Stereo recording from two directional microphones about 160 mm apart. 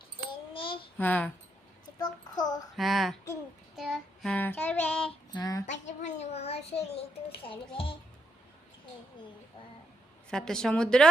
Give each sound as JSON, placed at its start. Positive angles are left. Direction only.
{"t": 0.5, "sound": "a sound", "side_deg": 35}
{"t": 0.9, "sound": "a child's voice", "side_deg": 10}
{"t": 2.0, "sound": "child singing", "side_deg": 25}
{"t": 2.7, "sound": "a woman's voice", "side_deg": 0}
{"t": 3.8, "sound": "child singing", "side_deg": 0}
{"t": 5.3, "sound": "child singing", "side_deg": 25}
{"t": 5.6, "sound": "a sound", "side_deg": 45}
{"t": 7.4, "sound": "a child's voice", "side_deg": 35}
{"t": 10.2, "sound": "a woman's voice", "side_deg": 5}